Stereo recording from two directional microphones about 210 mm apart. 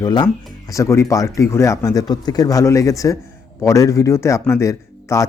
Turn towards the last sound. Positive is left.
turn(degrees=15)  # may be behind; listen again after turning